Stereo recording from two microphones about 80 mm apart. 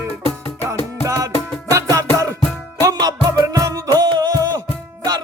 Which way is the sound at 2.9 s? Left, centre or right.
Right.